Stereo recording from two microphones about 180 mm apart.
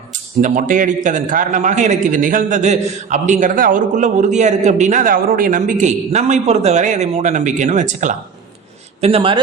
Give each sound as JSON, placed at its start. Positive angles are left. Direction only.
{"t": 0.1, "sound": "a man's voice", "side_deg": -45}